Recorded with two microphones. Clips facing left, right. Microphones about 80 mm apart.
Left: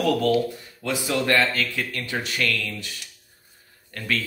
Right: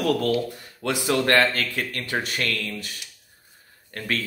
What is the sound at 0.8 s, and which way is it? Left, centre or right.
Speech, right.